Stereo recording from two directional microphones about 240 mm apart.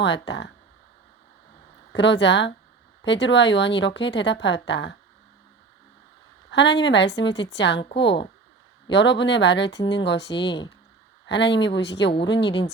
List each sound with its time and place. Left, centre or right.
0.0 s a woman's voice: left
1.9 s a woman's voice: left
6.5 s a woman's voice: left
10.3 s speech: centre
11.3 s a woman's voice: left
12.5 s speech: left